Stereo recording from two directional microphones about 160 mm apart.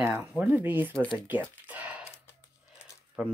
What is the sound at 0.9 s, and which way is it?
Speech, 5° left (ahead or behind).